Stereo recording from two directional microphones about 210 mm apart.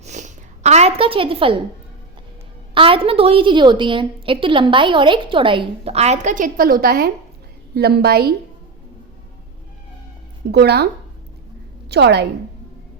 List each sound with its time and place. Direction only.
0.0 s a sound: 35° right (ahead or behind)
2.7 s a woman's voice: 25° right (ahead or behind); by 8.3 s 50° right (ahead or behind)
10.5 s a woman's voice: 50° right (ahead or behind)
11.9 s a woman's voice: 50° right (ahead or behind)